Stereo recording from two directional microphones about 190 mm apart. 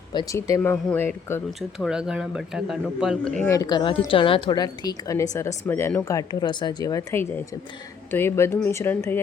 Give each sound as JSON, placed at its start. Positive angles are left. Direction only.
{"t": 0.1, "sound": "speech", "side_deg": 20}
{"t": 1.5, "sound": "speech", "side_deg": 0}
{"t": 3.5, "sound": "a woman's voice", "side_deg": 20}